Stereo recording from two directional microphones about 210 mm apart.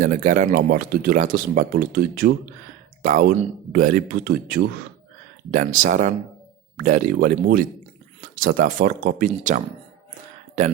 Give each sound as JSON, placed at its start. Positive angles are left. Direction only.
{"t": 0.0, "sound": "speech", "side_deg": -35}